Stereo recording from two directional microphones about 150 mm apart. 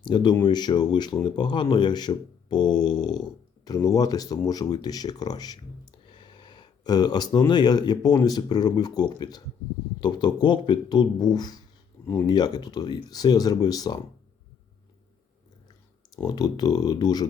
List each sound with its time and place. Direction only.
0.0 s speech: 30° left (ahead or behind)
16.1 s speech: 25° left (ahead or behind)